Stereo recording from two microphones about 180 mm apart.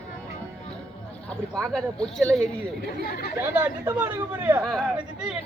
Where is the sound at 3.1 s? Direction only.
55° left (ahead or behind).